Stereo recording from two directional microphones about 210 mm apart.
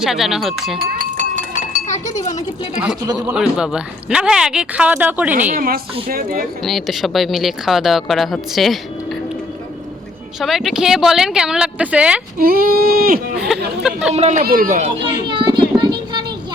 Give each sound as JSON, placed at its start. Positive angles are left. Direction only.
{"t": 0.0, "sound": "speech", "side_deg": 0}
{"t": 0.8, "sound": "chink", "side_deg": -40}
{"t": 3.2, "sound": "speech", "side_deg": -5}
{"t": 5.3, "sound": "a woman's voice", "side_deg": -35}
{"t": 6.6, "sound": "speech", "side_deg": 0}
{"t": 10.4, "sound": "speech", "side_deg": 0}
{"t": 12.4, "sound": "a woman's voice", "side_deg": -45}
{"t": 13.3, "sound": "a sound", "side_deg": -5}
{"t": 14.1, "sound": "speech", "side_deg": -30}
{"t": 15.3, "sound": "a sound", "side_deg": -20}